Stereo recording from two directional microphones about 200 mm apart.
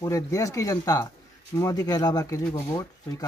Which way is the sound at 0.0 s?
15° left (ahead or behind).